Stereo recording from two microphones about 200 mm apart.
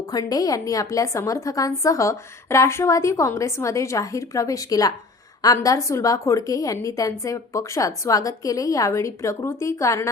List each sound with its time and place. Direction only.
0.1 s a woman's voice: 20° left (ahead or behind)